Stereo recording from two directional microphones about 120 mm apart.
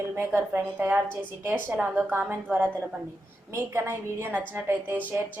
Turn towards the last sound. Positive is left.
turn(degrees=-15)  # may be behind; listen again after turning